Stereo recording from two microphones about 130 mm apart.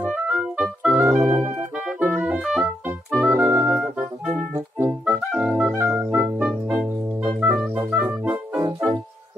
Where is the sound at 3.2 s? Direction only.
20° right (ahead or behind).